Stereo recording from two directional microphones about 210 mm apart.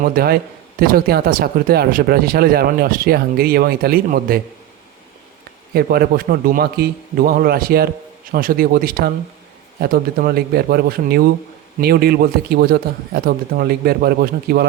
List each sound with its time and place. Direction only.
0.0 s speech: 45° right (ahead or behind)
5.7 s speech: 45° right (ahead or behind)